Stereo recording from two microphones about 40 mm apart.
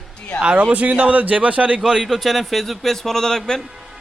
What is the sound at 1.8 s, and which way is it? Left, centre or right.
Speech, centre.